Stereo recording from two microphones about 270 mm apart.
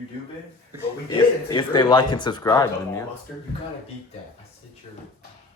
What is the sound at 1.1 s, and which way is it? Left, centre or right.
Speech, centre.